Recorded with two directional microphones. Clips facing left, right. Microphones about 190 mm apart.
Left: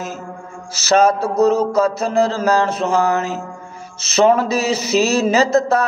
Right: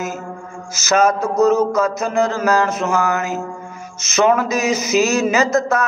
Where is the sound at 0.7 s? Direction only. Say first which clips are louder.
Left 2 dB; 30° left (ahead or behind).